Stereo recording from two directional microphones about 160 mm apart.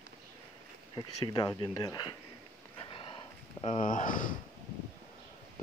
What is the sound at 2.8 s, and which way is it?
Horse, 35° left (ahead or behind).